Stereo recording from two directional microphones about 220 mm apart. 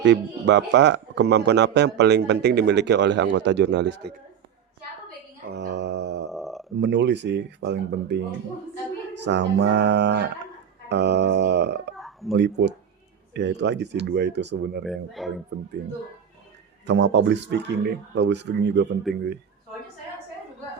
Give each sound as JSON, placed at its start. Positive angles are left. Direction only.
{"t": 0.0, "sound": "speech", "side_deg": -55}
{"t": 5.5, "sound": "a sound", "side_deg": -50}
{"t": 6.3, "sound": "a sound", "side_deg": 0}
{"t": 6.7, "sound": "speech", "side_deg": -50}
{"t": 9.2, "sound": "speech", "side_deg": -50}
{"t": 11.9, "sound": "a sound", "side_deg": 0}
{"t": 12.3, "sound": "speech", "side_deg": -50}
{"t": 14.8, "sound": "speech", "side_deg": 0}
{"t": 16.8, "sound": "speech", "side_deg": -50}